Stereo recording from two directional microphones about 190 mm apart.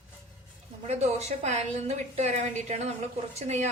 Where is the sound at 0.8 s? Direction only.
35° right (ahead or behind).